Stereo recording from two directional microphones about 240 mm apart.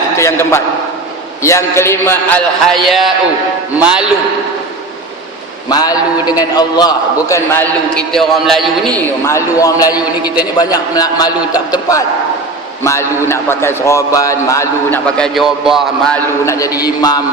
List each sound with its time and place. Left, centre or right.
0.2 s a man's voice: centre
5.6 s a man's voice: centre
8.1 s a man's voice: centre
9.2 s a man's voice: centre
16.5 s a man's voice: centre